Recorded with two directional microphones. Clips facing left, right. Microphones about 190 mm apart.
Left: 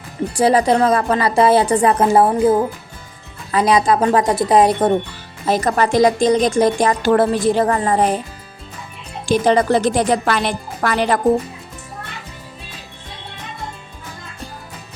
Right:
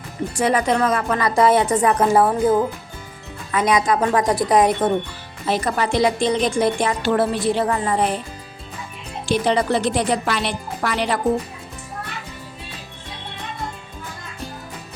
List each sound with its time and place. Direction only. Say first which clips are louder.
0.3 s a woman's voice: left 5 dB; 35° left (ahead or behind)
5.5 s speech: left 4 dB; 45° left (ahead or behind)
9.3 s speech: left 4 dB; 45° left (ahead or behind)